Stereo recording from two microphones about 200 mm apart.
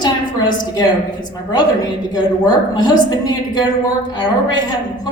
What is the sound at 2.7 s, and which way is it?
Speech, 20° left (ahead or behind).